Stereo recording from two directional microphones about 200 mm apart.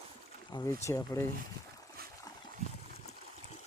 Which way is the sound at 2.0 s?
50° right (ahead or behind).